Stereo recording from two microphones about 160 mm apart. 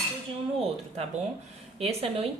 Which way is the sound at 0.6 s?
40° right (ahead or behind).